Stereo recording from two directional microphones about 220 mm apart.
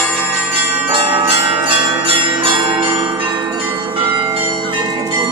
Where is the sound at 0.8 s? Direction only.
25° right (ahead or behind).